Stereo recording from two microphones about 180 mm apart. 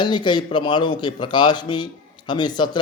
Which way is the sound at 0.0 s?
25° left (ahead or behind).